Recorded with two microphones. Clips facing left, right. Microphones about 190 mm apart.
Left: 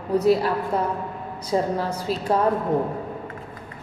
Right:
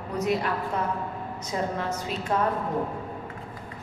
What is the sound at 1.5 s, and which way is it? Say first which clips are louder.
Speech: left 6 dB; 35° left (ahead or behind).